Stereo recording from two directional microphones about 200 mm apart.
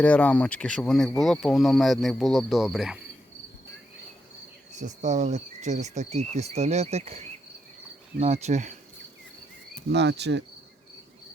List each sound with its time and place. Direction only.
0.0 s speech: 5° left (ahead or behind)
4.7 s speech: 35° right (ahead or behind)
9.9 s cricket: 60° right (ahead or behind)